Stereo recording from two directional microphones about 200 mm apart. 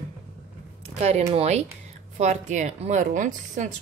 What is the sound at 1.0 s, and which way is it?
A woman's voice, 30° right (ahead or behind).